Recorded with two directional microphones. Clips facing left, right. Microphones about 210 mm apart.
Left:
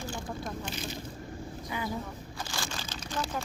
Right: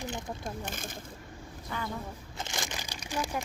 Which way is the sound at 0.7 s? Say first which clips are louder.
Left 3 dB; 50° right (ahead or behind).